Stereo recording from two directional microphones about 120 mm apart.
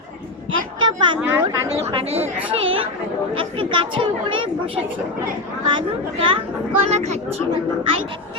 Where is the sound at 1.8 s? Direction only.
60° right (ahead or behind).